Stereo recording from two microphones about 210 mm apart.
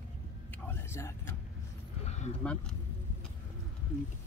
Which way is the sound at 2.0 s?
35° left (ahead or behind).